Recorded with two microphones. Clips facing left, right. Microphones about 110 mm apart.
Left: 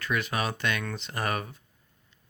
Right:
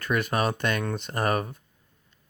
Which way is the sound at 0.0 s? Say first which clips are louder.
Right 4 dB; 50° right (ahead or behind).